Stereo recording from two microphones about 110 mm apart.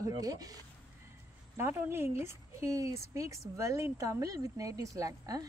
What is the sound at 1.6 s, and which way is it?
A woman's voice, 20° right (ahead or behind).